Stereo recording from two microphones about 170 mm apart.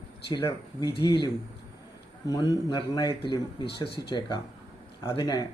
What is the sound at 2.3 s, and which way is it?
Speech, 20° left (ahead or behind).